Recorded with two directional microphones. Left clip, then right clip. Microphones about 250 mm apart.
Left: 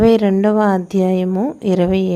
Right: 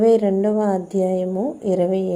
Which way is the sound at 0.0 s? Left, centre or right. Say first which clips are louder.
Left 3 dB; left.